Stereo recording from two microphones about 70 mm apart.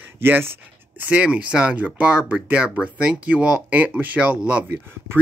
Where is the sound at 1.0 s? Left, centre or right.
Centre.